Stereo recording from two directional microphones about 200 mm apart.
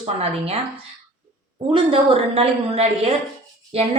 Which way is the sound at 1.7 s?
25° right (ahead or behind).